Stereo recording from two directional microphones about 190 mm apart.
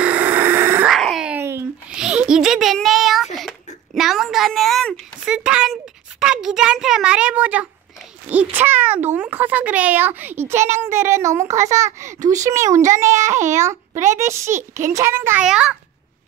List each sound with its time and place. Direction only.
0.0 s a sound: 10° right (ahead or behind)
0.9 s babbling: centre (ahead or behind)
3.3 s a sound: centre (ahead or behind)
8.3 s a child's voice: 10° right (ahead or behind)
12.2 s a child's voice: 40° right (ahead or behind)
12.4 s a child's voice: 15° right (ahead or behind)
13.3 s a child's voice: 40° right (ahead or behind)
14.2 s a child's voice: 15° right (ahead or behind)